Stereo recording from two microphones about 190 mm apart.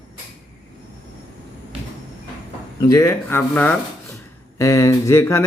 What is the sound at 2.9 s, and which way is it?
Speech, 15° left (ahead or behind).